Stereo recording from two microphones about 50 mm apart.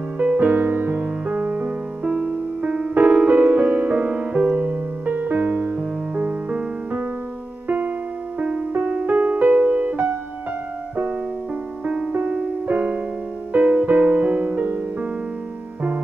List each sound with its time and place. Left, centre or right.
0.2 s music: right
7.6 s keyboard: right
8.4 s music: right
11.8 s music: centre